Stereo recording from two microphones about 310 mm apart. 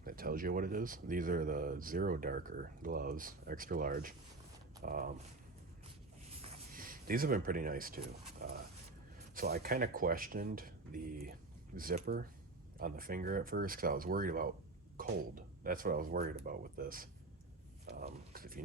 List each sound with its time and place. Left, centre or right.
0.0 s speech: right
6.4 s speech: right